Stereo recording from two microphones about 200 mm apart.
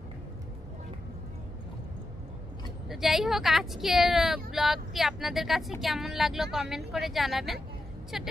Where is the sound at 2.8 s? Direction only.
Centre (ahead or behind).